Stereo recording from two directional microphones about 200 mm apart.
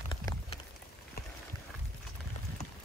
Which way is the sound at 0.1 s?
25° left (ahead or behind).